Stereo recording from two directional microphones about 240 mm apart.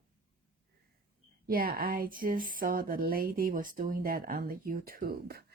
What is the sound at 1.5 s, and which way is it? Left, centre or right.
Speech, right.